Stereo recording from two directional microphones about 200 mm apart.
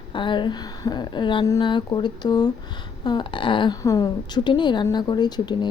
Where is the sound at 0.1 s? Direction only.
25° left (ahead or behind).